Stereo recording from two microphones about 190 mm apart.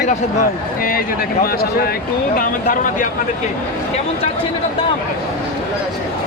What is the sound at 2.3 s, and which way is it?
Speech, 50° left (ahead or behind).